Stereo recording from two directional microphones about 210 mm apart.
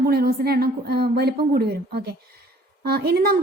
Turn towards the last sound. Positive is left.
turn(degrees=-50)  # may be behind; listen again after turning